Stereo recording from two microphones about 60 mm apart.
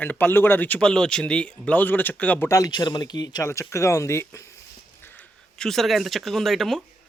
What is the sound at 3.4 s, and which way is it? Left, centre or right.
Speech, left.